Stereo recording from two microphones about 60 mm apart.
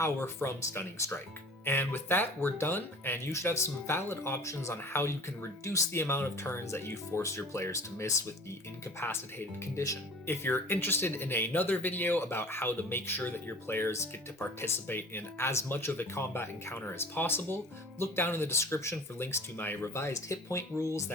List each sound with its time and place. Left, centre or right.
0.0 s speech: left
1.6 s speech: left
3.3 s speech: left
5.6 s speech: left
6.0 s speech: left
7.2 s speech: left
9.0 s speech: left
9.7 s speech: left
10.2 s speech: left
15.7 s speech: left
16.1 s speech: left
19.5 s speech: left
19.9 s speech: left